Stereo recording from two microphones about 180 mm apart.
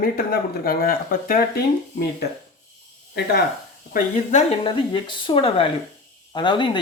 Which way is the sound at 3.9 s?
35° left (ahead or behind).